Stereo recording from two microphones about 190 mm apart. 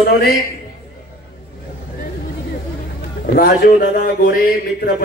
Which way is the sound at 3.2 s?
55° left (ahead or behind).